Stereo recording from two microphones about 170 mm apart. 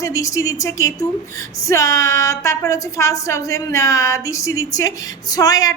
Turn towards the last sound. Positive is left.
turn(degrees=20)  # may be behind; listen again after turning